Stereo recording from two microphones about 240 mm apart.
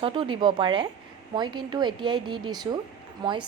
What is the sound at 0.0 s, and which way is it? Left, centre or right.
A woman's voice, right.